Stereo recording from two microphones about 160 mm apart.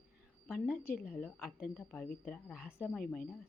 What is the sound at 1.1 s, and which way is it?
Speech, 10° left (ahead or behind).